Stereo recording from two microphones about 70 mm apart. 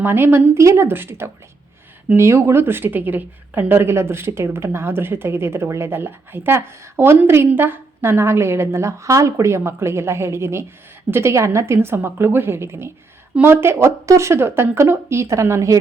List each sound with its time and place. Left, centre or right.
0.0 s speech: right